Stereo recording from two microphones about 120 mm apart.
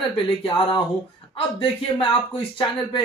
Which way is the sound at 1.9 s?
40° left (ahead or behind).